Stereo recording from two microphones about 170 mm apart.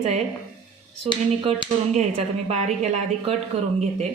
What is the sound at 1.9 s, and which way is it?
A woman's voice, 40° right (ahead or behind).